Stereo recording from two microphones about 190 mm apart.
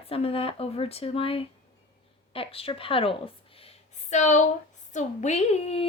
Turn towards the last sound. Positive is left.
turn(degrees=35)  # may be behind; listen again after turning